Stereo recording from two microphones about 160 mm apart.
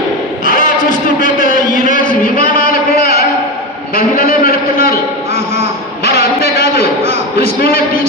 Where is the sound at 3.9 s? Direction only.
65° left (ahead or behind).